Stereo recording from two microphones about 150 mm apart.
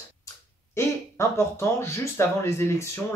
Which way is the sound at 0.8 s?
20° left (ahead or behind).